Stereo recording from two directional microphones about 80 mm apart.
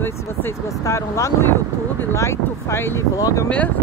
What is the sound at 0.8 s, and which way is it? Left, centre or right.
Speech, left.